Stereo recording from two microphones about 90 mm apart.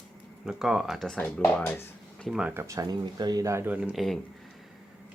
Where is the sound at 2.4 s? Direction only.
30° right (ahead or behind).